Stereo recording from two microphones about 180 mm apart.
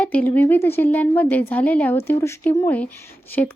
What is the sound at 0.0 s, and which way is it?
Speech, 5° left (ahead or behind).